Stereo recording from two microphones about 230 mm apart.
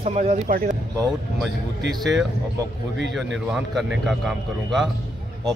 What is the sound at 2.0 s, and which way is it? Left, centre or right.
A man's voice, centre.